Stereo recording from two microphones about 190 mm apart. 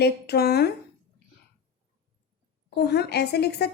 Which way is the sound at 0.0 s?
55° left (ahead or behind).